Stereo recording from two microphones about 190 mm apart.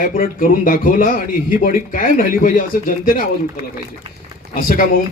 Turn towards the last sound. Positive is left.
turn(degrees=45)  # may be behind; listen again after turning